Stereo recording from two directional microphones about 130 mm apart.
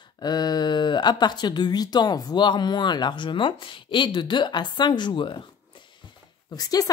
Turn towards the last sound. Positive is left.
turn(degrees=30)  # may be behind; listen again after turning